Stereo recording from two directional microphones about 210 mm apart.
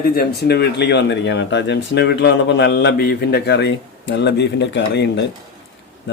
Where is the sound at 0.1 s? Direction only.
50° left (ahead or behind).